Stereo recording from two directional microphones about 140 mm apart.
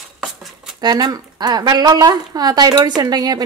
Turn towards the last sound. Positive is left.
turn(degrees=-30)  # may be behind; listen again after turning